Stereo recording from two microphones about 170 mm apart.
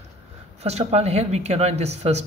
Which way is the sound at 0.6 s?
40° right (ahead or behind).